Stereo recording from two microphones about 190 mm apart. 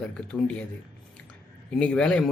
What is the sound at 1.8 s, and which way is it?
Speech, 5° left (ahead or behind).